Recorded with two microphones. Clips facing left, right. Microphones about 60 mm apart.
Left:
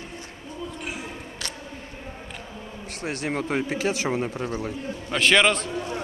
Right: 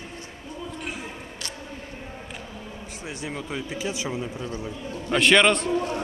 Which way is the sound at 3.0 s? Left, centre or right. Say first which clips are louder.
Left 6 dB; left.